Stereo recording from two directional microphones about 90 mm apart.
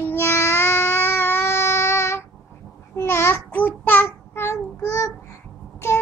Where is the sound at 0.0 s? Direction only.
30° left (ahead or behind).